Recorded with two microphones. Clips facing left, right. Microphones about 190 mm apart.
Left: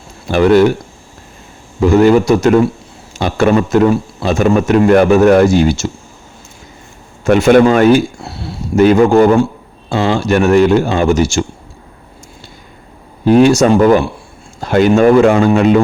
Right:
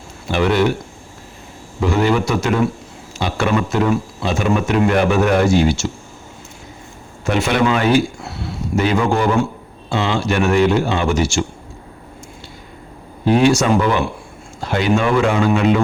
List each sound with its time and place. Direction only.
0.3 s speech: 45° left (ahead or behind)
1.8 s speech: 45° left (ahead or behind)
7.3 s speech: 50° left (ahead or behind)
8.2 s a sound: 30° left (ahead or behind)
8.7 s speech: 45° left (ahead or behind)
13.2 s speech: 45° left (ahead or behind)